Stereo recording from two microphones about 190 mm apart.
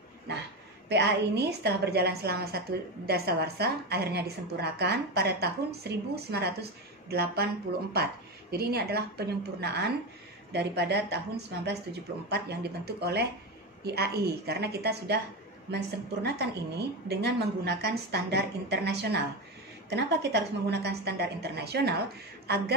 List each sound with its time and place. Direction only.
0.8 s a woman's voice: 60° right (ahead or behind)
8.5 s a woman's voice: 55° right (ahead or behind)